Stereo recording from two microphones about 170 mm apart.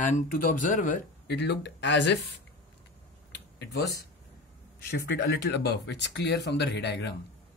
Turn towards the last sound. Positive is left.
turn(degrees=85)